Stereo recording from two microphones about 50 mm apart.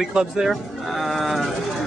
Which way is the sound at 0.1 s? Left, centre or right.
Centre.